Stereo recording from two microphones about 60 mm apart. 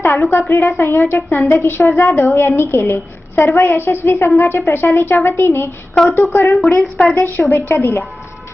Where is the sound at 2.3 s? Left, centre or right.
Left.